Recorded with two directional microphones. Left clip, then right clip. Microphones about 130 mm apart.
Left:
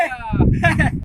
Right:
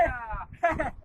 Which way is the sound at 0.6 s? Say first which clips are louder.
Left 7 dB; 20° left (ahead or behind).